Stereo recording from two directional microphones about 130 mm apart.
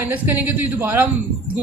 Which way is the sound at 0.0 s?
15° right (ahead or behind).